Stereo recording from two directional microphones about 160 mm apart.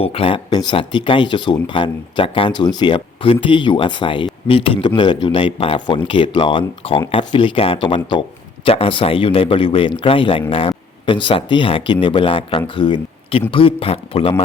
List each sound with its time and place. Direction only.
0.0 s speech: 35° left (ahead or behind)